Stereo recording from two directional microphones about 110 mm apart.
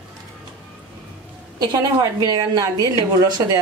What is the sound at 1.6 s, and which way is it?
A woman's voice, 35° right (ahead or behind).